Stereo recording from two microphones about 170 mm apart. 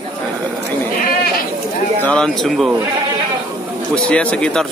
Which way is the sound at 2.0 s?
5° left (ahead or behind).